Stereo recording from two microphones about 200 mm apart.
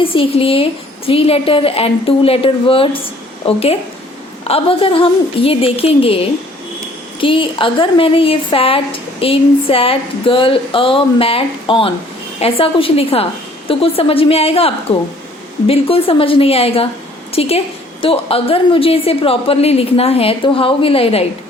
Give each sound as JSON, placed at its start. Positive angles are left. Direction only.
{"t": 0.0, "sound": "a woman's voice", "side_deg": 25}